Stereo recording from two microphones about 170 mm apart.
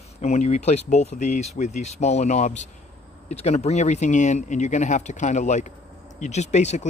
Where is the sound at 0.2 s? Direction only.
45° left (ahead or behind).